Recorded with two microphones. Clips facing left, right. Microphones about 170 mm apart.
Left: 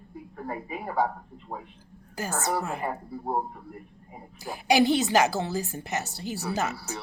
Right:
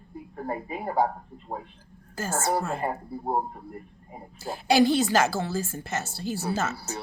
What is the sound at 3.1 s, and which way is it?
Speech, 25° right (ahead or behind).